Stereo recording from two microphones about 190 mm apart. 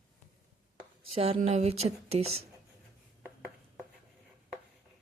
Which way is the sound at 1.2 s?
30° right (ahead or behind).